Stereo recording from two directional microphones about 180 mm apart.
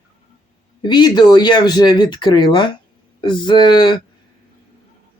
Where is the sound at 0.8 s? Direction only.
25° left (ahead or behind).